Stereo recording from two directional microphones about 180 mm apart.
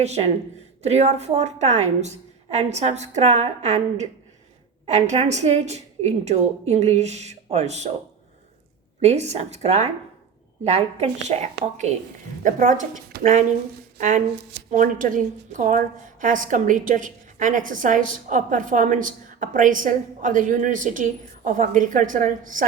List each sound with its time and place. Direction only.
0.0 s a woman's voice: 35° right (ahead or behind)
9.0 s a woman's voice: 40° right (ahead or behind)
14.7 s a woman's voice: 50° right (ahead or behind)